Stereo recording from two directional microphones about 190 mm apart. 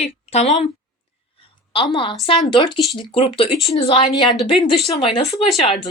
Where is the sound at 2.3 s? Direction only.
25° left (ahead or behind).